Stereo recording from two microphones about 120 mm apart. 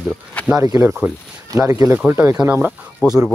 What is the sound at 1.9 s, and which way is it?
Speech, 15° right (ahead or behind).